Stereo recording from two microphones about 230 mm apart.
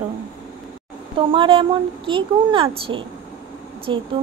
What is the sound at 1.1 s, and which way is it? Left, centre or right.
Speech, right.